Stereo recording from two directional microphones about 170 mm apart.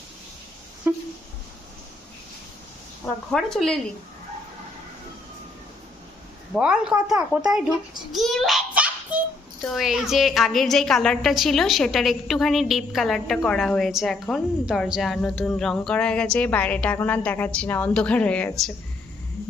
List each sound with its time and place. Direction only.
0.9 s a sound: 10° right (ahead or behind)
3.3 s a woman's voice: 5° left (ahead or behind)
6.5 s a child's voice: 5° right (ahead or behind)